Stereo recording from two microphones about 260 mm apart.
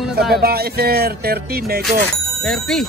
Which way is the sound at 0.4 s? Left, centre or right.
Right.